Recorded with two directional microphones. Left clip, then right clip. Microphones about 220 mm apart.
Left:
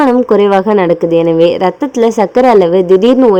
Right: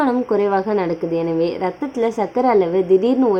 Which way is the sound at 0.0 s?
30° left (ahead or behind).